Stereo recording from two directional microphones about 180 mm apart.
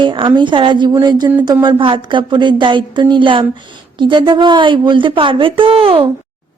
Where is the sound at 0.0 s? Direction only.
30° right (ahead or behind).